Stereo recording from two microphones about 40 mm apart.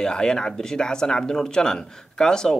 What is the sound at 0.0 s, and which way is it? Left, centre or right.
Speech, centre.